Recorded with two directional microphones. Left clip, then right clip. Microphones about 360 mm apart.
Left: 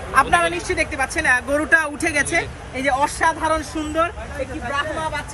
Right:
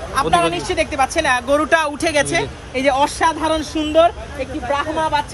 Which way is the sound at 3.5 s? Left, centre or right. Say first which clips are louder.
Right 5 dB; right.